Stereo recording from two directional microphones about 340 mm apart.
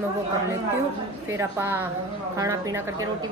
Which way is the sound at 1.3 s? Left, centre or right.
Centre.